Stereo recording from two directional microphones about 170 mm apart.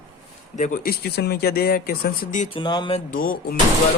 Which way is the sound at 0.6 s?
50° left (ahead or behind).